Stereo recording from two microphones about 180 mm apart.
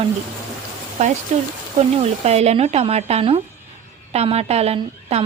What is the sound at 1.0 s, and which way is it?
Speech, 40° right (ahead or behind).